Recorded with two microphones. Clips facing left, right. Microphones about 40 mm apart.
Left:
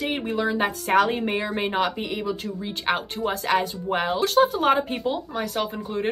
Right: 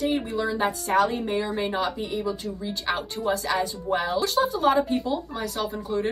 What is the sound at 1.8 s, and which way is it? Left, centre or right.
Speech, left.